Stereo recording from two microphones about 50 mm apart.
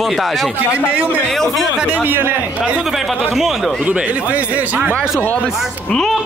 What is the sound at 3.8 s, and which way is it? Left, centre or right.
A man's voice, right.